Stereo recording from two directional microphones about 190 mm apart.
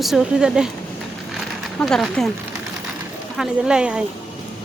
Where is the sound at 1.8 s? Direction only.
Centre (ahead or behind).